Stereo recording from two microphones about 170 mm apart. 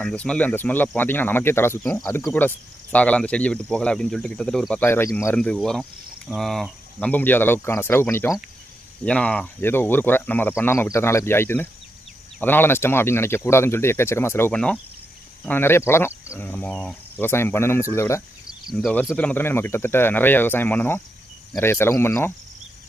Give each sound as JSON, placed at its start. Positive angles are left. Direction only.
{"t": 0.0, "sound": "speech", "side_deg": 5}
{"t": 2.0, "sound": "speech", "side_deg": 20}
{"t": 2.2, "sound": "speech", "side_deg": 10}
{"t": 18.4, "sound": "cricket", "side_deg": 0}
{"t": 19.1, "sound": "speech", "side_deg": 10}